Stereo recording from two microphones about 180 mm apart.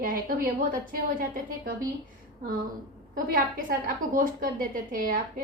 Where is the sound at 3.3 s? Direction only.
55° right (ahead or behind).